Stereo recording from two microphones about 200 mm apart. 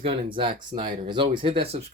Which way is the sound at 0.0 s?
25° right (ahead or behind).